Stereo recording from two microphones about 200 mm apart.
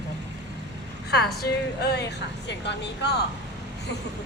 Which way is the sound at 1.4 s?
55° left (ahead or behind).